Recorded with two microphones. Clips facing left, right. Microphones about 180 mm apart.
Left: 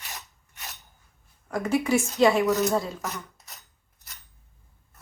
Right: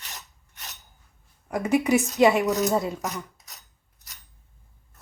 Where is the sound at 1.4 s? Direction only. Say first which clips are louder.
Right 2 dB; 15° right (ahead or behind).